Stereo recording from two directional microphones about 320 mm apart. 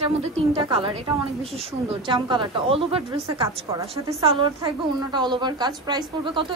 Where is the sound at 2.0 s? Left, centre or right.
Centre.